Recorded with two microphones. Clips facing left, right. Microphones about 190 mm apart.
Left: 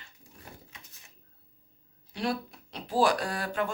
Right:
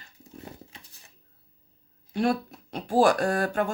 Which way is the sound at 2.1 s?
50° right (ahead or behind).